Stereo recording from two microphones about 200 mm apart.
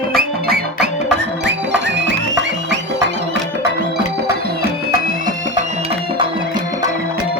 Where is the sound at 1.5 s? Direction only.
65° right (ahead or behind).